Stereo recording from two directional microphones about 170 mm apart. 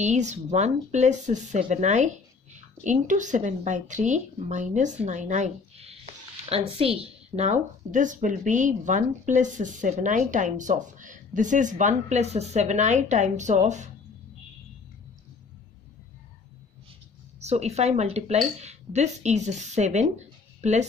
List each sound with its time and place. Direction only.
0.0 s speech: 45° right (ahead or behind)
17.4 s speech: 40° right (ahead or behind)